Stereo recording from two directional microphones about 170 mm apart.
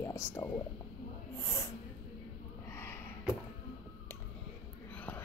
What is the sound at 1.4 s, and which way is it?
Snort, 15° left (ahead or behind).